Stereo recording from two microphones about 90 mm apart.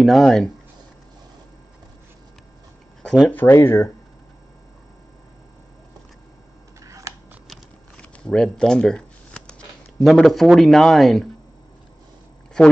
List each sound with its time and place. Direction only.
0.0 s speech: centre (ahead or behind)
3.0 s a sound: 5° left (ahead or behind)
3.3 s speech: 25° left (ahead or behind)
6.8 s camera: 40° right (ahead or behind)
8.0 s shuffling cards: 10° left (ahead or behind)
10.0 s speech: centre (ahead or behind)